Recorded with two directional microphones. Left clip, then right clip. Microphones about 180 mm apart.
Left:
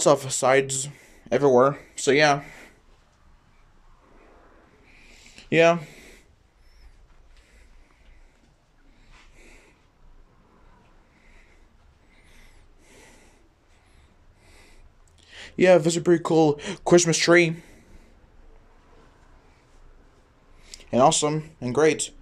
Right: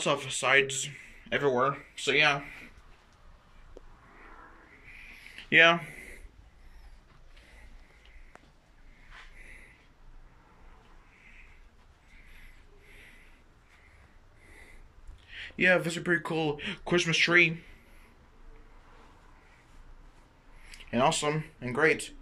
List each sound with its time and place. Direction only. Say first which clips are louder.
0.0 s speech: left 9 dB; 35° left (ahead or behind)
4.9 s a sound: right 2 dB; 25° left (ahead or behind)
15.2 s speech: left 7 dB; 35° left (ahead or behind)
20.6 s speech: left 8 dB; 25° left (ahead or behind)